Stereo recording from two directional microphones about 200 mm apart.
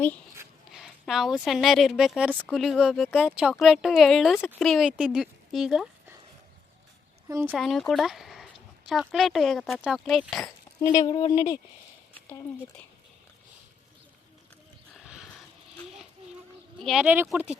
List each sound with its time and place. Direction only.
0.7 s a woman's voice: centre (ahead or behind)
7.3 s speech: 10° right (ahead or behind)
7.5 s a woman's voice: centre (ahead or behind)
10.8 s speech: 20° left (ahead or behind)
14.9 s a sound: centre (ahead or behind)
16.8 s a woman's voice: centre (ahead or behind)